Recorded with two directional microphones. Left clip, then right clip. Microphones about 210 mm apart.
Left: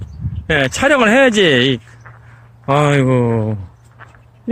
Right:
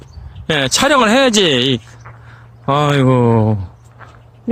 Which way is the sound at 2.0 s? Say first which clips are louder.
Right 2 dB; 5° left (ahead or behind).